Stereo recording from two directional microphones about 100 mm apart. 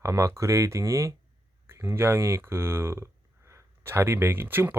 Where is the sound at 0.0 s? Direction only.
30° right (ahead or behind).